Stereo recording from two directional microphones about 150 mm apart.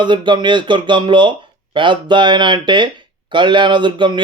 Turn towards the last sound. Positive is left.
turn(degrees=-30)  # may be behind; listen again after turning